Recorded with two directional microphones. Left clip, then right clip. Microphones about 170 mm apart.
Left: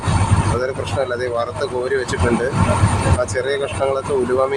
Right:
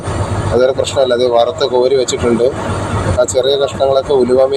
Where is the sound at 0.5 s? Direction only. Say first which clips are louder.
Right 14 dB; 15° right (ahead or behind).